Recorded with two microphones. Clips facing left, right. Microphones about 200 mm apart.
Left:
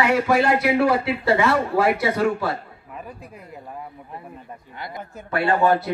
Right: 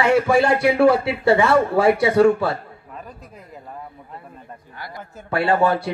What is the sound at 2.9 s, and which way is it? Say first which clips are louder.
Speech: left 1 dB; 5° left (ahead or behind).